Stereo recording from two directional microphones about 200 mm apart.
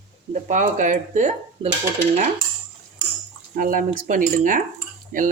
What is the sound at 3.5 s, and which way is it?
Speech, 45° right (ahead or behind).